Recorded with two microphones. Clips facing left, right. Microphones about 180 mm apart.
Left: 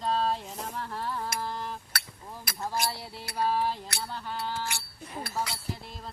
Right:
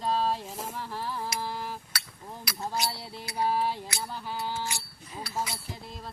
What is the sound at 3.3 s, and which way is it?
Music, 15° right (ahead or behind).